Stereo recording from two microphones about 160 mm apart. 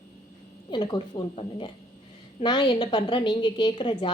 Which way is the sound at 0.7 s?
30° left (ahead or behind).